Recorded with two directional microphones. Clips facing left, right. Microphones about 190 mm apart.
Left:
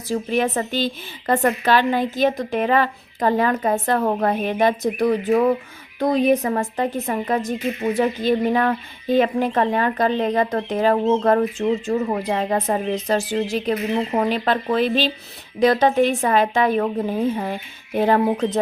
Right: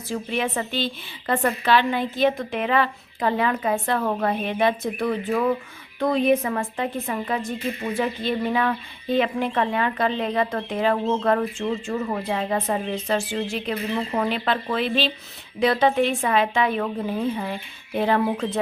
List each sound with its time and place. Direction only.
0.1 s a woman's voice: 40° left (ahead or behind)